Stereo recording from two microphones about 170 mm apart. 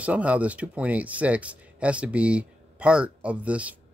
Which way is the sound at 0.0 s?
10° right (ahead or behind).